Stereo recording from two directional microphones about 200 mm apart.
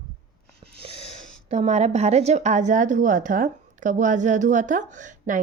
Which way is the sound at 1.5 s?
35° right (ahead or behind).